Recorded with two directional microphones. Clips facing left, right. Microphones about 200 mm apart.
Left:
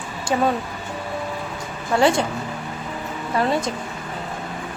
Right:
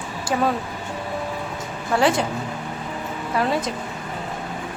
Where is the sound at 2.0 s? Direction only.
Centre (ahead or behind).